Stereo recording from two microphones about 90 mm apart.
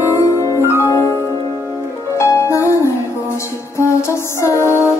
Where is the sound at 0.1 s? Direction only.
35° left (ahead or behind).